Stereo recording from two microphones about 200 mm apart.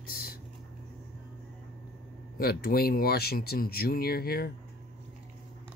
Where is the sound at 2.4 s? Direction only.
50° left (ahead or behind).